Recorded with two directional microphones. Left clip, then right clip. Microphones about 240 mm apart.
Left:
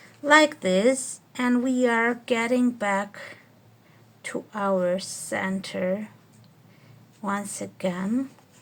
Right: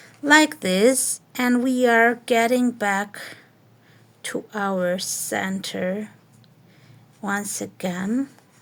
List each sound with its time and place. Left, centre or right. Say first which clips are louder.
0.3 s a woman's voice: right 2 dB; right
7.3 s a woman's voice: right 3 dB; right